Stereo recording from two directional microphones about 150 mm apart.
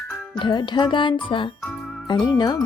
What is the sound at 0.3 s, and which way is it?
Speech, 30° left (ahead or behind).